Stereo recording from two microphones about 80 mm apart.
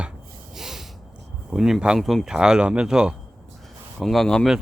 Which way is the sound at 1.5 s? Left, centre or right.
Centre.